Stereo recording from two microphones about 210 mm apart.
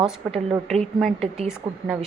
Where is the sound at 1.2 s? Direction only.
30° right (ahead or behind).